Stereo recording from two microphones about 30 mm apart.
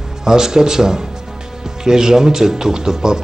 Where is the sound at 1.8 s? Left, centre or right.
Right.